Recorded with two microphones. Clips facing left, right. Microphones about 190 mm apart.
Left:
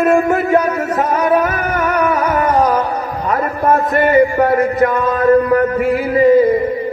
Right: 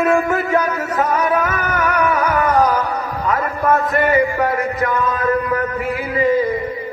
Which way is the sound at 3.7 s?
40° left (ahead or behind).